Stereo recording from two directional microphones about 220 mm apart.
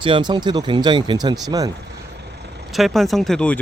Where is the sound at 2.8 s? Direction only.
Centre (ahead or behind).